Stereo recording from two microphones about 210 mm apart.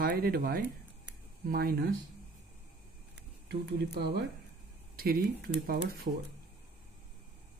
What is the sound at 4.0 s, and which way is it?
Speech, 50° right (ahead or behind).